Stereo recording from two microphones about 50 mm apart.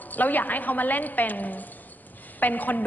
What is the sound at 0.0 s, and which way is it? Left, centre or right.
A woman's voice, left.